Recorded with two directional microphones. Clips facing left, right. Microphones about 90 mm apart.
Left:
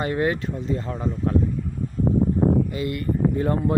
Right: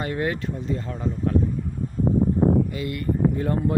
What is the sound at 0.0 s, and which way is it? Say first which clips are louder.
Speech: left 3 dB; 30° left (ahead or behind).